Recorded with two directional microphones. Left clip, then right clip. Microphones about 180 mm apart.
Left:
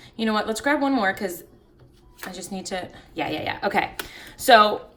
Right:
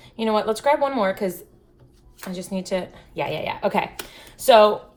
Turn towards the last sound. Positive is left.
turn(degrees=65)  # may be behind; listen again after turning